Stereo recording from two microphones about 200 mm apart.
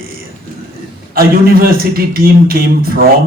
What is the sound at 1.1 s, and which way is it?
A man's voice, 50° right (ahead or behind).